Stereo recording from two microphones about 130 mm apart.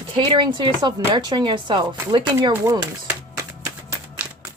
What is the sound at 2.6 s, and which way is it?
Speech, 25° right (ahead or behind).